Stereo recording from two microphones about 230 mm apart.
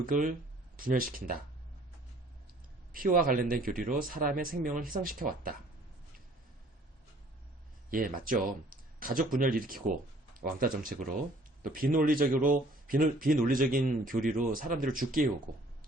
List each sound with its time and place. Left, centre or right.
0.0 s speech: right
2.9 s speech: right
7.9 s speech: right